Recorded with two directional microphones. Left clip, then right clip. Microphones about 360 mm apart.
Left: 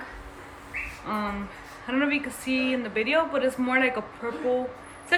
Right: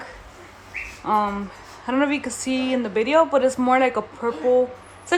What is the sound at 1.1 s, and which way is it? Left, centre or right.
Speech, centre.